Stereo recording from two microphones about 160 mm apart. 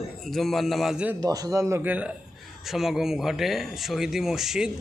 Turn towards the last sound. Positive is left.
turn(degrees=0)  # may be behind; listen again after turning